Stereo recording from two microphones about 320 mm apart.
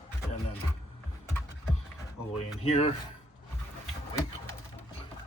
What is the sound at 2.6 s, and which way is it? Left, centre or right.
Speech, centre.